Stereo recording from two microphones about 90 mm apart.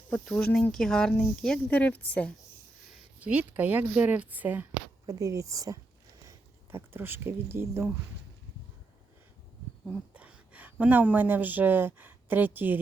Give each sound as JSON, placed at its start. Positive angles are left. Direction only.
{"t": 0.1, "sound": "speech", "side_deg": 10}
{"t": 3.2, "sound": "a woman's voice", "side_deg": -15}
{"t": 5.0, "sound": "a woman's voice", "side_deg": -35}
{"t": 6.2, "sound": "speech", "side_deg": -30}
{"t": 10.2, "sound": "speech", "side_deg": -15}